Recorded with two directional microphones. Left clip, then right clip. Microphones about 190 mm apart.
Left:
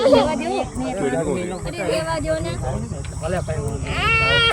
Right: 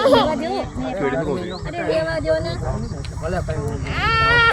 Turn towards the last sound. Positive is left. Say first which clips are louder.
# right 1 dB
turn(degrees=55)  # may be behind; listen again after turning